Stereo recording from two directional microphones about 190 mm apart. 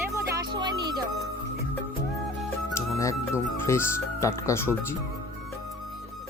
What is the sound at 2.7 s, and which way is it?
Music, 15° left (ahead or behind).